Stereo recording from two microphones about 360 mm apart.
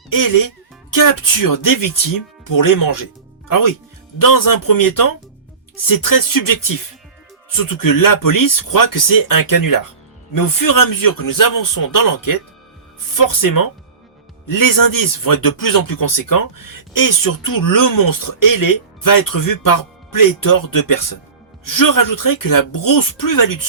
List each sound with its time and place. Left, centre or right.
0.1 s speech: left
4.2 s speech: left